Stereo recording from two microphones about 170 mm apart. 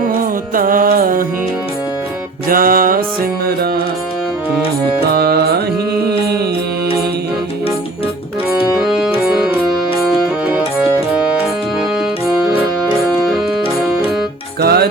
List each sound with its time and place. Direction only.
0.5 s music: 55° right (ahead or behind)
2.5 s music: 55° right (ahead or behind)
5.1 s music: 65° right (ahead or behind)
8.8 s music: centre (ahead or behind)
14.6 s music: 70° right (ahead or behind)